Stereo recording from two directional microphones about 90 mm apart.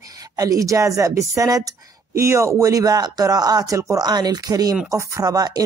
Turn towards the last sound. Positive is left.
turn(degrees=-45)  # may be behind; listen again after turning